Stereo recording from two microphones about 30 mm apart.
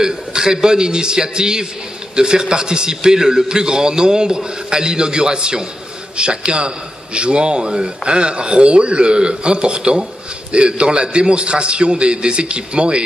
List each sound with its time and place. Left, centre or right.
0.0 s a man's voice: right